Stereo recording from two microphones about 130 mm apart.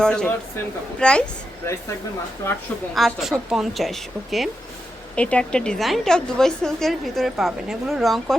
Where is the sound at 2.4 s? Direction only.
20° left (ahead or behind).